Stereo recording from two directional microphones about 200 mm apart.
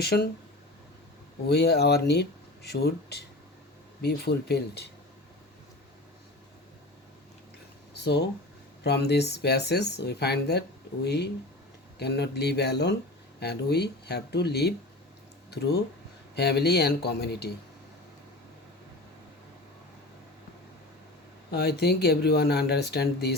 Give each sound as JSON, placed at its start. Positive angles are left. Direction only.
{"t": 0.0, "sound": "speech", "side_deg": 55}
{"t": 1.5, "sound": "speech", "side_deg": 55}
{"t": 7.9, "sound": "speech", "side_deg": 60}
{"t": 21.5, "sound": "speech", "side_deg": 55}